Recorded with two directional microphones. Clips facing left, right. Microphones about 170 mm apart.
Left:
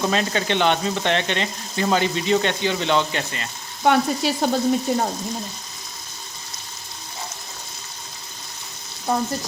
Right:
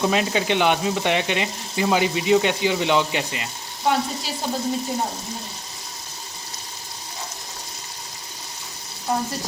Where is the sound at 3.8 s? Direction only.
65° left (ahead or behind).